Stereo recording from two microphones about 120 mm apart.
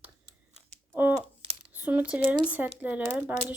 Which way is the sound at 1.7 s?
10° right (ahead or behind).